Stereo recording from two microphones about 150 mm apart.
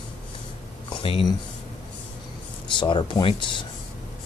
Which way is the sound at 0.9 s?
35° left (ahead or behind).